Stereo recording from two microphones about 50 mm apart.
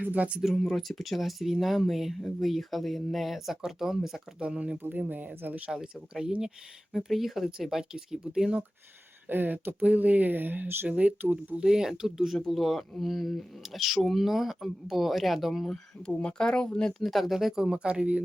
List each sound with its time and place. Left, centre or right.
0.0 s speech: right
0.5 s speech: centre
4.4 s speech: right
4.9 s speech: right
5.7 s speech: centre
6.9 s speech: centre
9.3 s speech: right
9.8 s speech: right
10.8 s speech: right
11.6 s speech: centre
15.7 s speech: centre
17.0 s speech: centre
17.8 s speech: right